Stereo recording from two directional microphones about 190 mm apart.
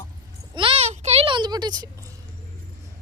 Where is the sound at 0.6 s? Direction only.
30° right (ahead or behind).